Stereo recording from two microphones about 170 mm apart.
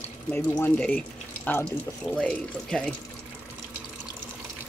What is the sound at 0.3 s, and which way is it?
Speech, 10° left (ahead or behind).